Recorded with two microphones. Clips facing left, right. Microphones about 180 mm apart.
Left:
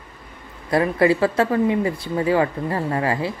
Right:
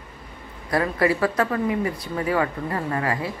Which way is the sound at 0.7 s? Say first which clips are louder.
Left 4 dB; 25° left (ahead or behind).